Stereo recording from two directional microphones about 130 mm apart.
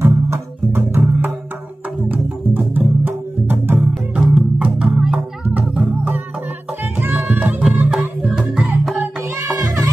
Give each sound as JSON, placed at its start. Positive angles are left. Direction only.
{"t": 0.0, "sound": "music", "side_deg": -20}
{"t": 9.4, "sound": "music", "side_deg": -25}